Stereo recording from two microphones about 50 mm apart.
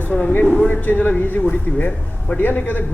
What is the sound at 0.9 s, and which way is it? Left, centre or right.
Speech, left.